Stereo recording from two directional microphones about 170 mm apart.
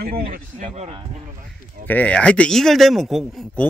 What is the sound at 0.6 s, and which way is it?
Speech, 40° right (ahead or behind).